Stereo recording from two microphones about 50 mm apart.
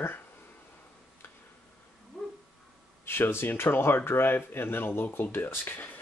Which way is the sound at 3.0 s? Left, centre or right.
Left.